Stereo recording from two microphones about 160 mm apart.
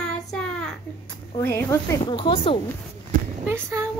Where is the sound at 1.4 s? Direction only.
15° left (ahead or behind).